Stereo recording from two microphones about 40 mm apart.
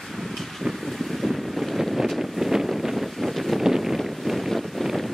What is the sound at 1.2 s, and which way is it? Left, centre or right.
Boat, centre.